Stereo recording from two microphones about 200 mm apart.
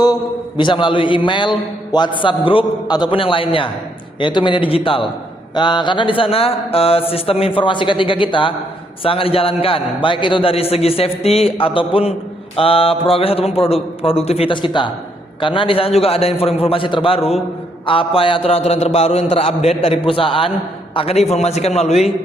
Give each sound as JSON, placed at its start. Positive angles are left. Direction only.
{"t": 0.0, "sound": "a man's voice", "side_deg": 20}